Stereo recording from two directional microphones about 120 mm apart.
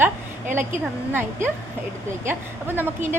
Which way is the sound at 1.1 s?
20° right (ahead or behind).